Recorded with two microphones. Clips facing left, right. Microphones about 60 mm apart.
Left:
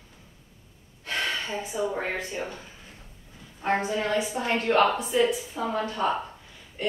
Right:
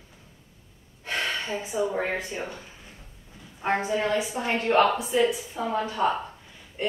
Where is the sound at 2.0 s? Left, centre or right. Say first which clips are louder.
Right 1 dB; centre.